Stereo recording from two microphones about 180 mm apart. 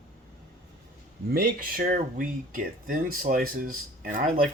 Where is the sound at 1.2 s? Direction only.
55° right (ahead or behind).